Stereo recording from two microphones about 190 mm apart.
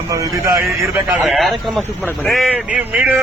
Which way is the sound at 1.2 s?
Centre (ahead or behind).